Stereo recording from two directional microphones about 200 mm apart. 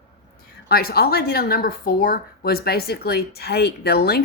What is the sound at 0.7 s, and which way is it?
A woman's voice, 50° left (ahead or behind).